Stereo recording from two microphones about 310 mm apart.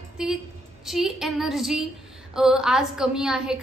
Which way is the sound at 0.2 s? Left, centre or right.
Centre.